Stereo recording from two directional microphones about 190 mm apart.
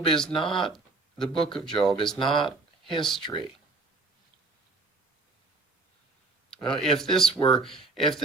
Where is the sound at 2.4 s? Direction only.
25° left (ahead or behind).